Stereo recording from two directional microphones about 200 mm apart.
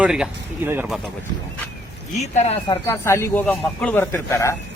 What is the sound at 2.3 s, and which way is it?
Speech, 30° left (ahead or behind).